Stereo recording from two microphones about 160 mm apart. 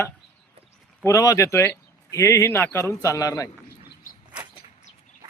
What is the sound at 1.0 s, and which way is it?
Speech, 20° left (ahead or behind).